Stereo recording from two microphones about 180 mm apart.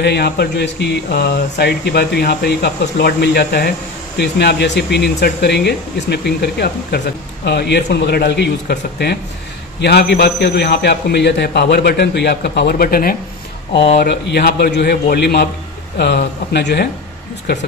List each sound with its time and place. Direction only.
0.0 s a man's voice: 65° left (ahead or behind)